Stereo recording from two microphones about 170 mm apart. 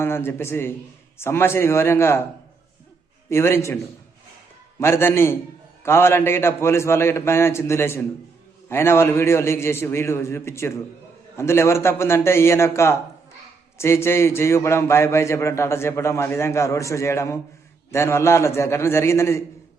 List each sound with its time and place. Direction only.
0.0 s a man's voice: 15° left (ahead or behind)
3.2 s a man's voice: 15° left (ahead or behind)
4.8 s a man's voice: 15° left (ahead or behind)